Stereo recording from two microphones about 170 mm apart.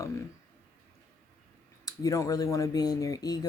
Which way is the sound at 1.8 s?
20° left (ahead or behind).